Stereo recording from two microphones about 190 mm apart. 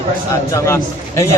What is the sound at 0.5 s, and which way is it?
Speech, 15° left (ahead or behind).